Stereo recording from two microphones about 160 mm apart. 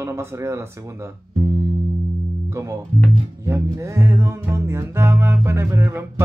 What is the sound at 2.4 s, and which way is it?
Music, 20° right (ahead or behind).